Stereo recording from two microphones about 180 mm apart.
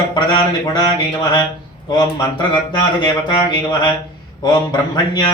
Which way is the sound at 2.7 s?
25° left (ahead or behind).